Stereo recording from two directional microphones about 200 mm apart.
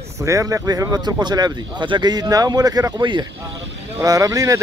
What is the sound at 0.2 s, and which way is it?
Speech, 15° right (ahead or behind).